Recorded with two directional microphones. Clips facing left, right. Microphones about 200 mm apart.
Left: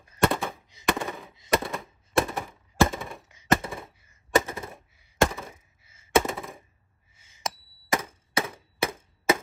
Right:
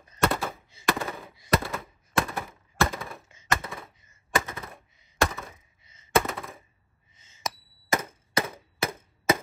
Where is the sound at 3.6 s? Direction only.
Centre (ahead or behind).